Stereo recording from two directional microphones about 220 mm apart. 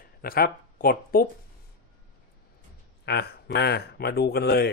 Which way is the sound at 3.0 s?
50° left (ahead or behind).